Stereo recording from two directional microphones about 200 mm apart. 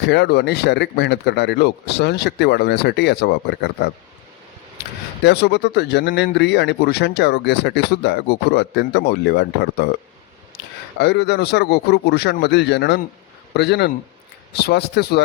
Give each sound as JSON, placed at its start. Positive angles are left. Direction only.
{"t": 0.0, "sound": "a man's voice", "side_deg": 60}
{"t": 5.2, "sound": "a man's voice", "side_deg": 55}
{"t": 11.0, "sound": "a man's voice", "side_deg": 55}